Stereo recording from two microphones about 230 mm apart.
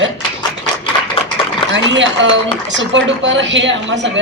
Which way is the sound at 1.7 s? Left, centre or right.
Right.